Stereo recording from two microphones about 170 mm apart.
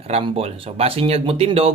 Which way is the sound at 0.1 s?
35° right (ahead or behind).